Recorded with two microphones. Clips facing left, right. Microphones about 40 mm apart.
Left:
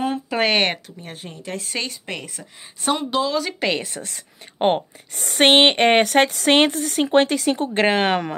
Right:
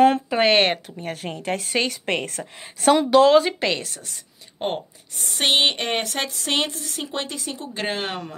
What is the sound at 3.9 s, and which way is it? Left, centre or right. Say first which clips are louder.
A woman's voice: left 6 dB; left.